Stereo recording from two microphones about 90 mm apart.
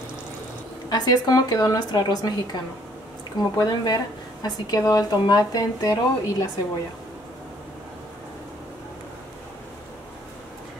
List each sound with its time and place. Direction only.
0.8 s speech: 50° left (ahead or behind)